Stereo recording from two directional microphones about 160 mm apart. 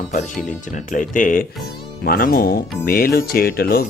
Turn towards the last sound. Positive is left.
turn(degrees=70)  # may be behind; listen again after turning